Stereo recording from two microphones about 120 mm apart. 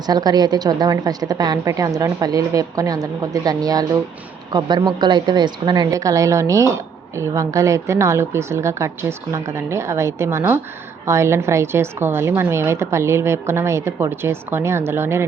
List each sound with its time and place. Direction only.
0.0 s a woman's voice: 35° right (ahead or behind)